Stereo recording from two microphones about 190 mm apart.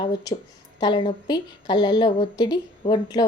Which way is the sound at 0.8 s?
25° left (ahead or behind).